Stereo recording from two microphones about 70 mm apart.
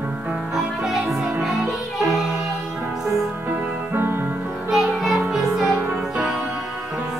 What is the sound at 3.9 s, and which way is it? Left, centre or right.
Music, right.